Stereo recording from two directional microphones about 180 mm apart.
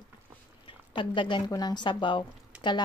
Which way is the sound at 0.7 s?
25° left (ahead or behind).